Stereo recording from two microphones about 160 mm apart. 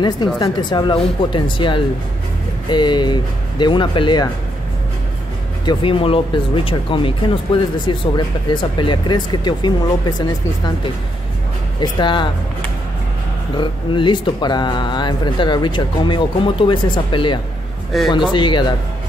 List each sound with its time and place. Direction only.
0.4 s speech: 25° left (ahead or behind)
5.7 s speech: 35° left (ahead or behind)
11.8 s speech: 30° left (ahead or behind)
13.6 s speech: 30° left (ahead or behind)
17.9 s speech: centre (ahead or behind)
18.3 s speech: 30° left (ahead or behind)